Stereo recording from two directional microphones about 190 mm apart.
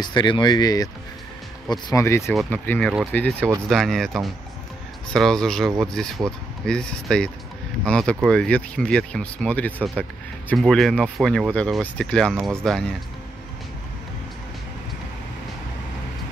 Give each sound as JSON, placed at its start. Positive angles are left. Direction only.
{"t": 0.0, "sound": "speech", "side_deg": 25}